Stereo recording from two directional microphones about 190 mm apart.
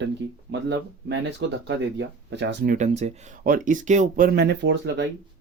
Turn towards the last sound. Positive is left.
turn(degrees=-70)  # may be behind; listen again after turning